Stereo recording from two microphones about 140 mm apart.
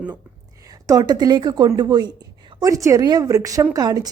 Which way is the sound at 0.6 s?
25° right (ahead or behind).